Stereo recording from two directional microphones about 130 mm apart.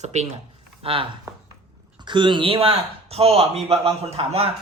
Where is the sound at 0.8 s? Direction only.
45° right (ahead or behind).